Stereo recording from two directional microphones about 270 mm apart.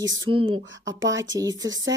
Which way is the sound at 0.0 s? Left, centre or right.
Right.